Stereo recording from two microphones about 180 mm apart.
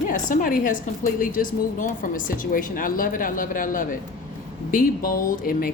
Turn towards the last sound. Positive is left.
turn(degrees=55)  # may be behind; listen again after turning